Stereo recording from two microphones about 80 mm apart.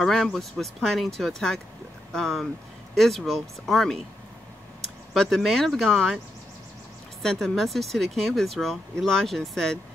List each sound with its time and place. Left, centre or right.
0.0 s speech: centre
5.1 s speech: centre
7.2 s speech: centre